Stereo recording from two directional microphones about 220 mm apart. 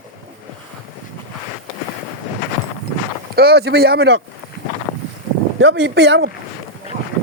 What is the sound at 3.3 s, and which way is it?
Speech, 45° right (ahead or behind).